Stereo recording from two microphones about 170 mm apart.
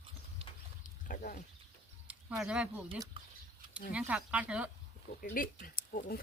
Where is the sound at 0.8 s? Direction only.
55° left (ahead or behind).